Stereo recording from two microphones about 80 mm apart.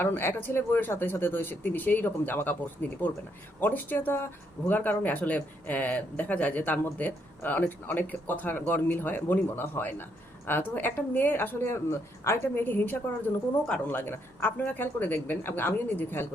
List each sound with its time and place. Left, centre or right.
0.0 s speech: left
3.6 s speech: left